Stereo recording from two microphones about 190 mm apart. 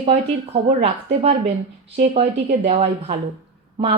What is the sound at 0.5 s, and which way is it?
Speech, 30° right (ahead or behind).